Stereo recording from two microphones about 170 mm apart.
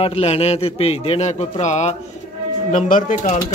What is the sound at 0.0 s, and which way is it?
A man's voice, 35° left (ahead or behind).